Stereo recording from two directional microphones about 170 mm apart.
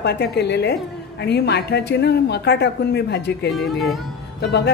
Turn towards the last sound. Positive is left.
turn(degrees=80)